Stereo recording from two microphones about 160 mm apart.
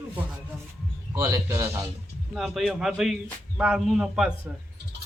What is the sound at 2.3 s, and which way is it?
Speech, centre (ahead or behind).